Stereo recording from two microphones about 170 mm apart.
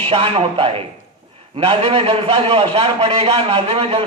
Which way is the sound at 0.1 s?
30° right (ahead or behind).